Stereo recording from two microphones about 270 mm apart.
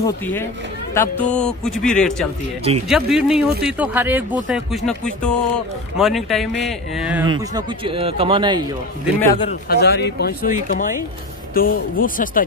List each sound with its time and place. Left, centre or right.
0.0 s speech: centre
7.5 s a man's voice: centre
9.2 s speech: centre
9.5 s speech: left